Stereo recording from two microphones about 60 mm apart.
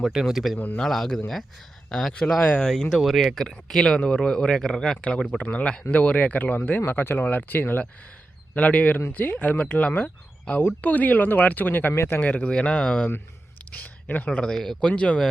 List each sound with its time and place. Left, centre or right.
0.0 s speech: centre
0.8 s speech: centre
4.9 s speech: left
12.2 s speech: left
13.7 s a sound: left
14.3 s speech: centre